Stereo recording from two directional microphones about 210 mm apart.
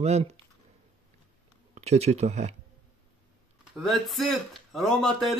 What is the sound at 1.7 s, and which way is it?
Speech, 30° right (ahead or behind).